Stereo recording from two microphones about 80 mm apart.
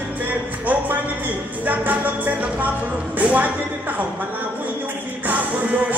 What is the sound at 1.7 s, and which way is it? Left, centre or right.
Music, right.